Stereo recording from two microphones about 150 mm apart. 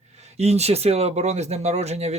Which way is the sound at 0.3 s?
45° right (ahead or behind).